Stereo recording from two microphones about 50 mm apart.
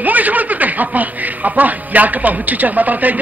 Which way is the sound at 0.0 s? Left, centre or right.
Right.